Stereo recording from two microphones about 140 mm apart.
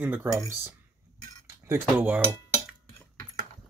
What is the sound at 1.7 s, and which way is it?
Speech, 10° right (ahead or behind).